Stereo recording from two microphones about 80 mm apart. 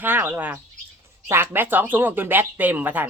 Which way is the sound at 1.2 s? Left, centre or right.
Right.